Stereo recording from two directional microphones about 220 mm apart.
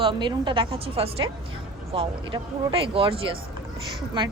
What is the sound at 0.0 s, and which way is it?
A woman's voice, 20° right (ahead or behind).